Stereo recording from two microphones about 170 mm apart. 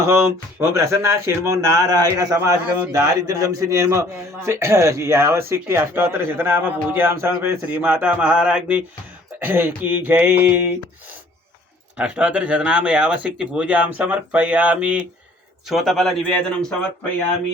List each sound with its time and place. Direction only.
0.6 s a man's voice: 15° right (ahead or behind)
11.9 s a man's voice: 5° right (ahead or behind)